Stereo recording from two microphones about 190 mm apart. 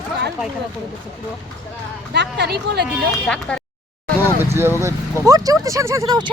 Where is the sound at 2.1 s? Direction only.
60° right (ahead or behind).